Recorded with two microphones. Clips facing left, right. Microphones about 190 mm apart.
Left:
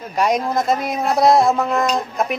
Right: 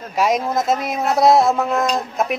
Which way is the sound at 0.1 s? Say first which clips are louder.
Even; centre (ahead or behind).